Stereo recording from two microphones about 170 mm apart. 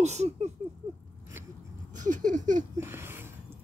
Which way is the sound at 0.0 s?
40° right (ahead or behind).